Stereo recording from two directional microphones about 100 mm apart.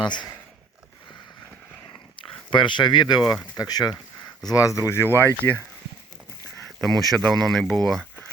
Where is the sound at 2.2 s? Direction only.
55° left (ahead or behind); by 5.6 s 25° left (ahead or behind).